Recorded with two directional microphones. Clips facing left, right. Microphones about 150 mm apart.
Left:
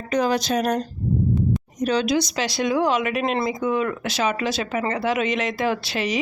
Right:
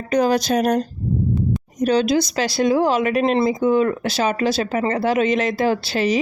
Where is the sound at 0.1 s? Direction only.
40° right (ahead or behind).